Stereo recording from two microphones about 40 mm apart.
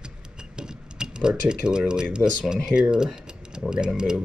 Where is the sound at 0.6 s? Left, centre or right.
Centre.